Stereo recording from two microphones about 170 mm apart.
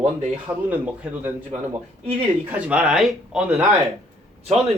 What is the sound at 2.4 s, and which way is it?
Speech, 10° right (ahead or behind).